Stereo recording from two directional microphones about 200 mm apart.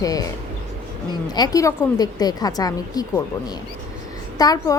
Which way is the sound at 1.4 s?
20° left (ahead or behind).